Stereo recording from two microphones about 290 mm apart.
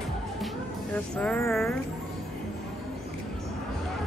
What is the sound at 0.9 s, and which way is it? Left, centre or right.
Speech, centre.